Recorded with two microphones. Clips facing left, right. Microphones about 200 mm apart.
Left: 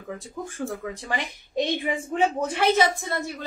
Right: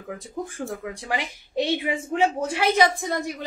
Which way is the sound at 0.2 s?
15° right (ahead or behind).